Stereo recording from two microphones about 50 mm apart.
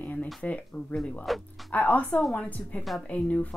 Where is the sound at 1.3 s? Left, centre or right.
Centre.